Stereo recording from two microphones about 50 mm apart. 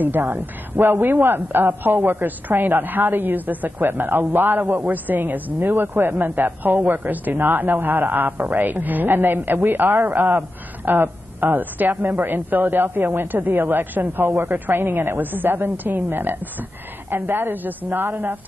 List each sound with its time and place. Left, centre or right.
0.0 s a man's voice: right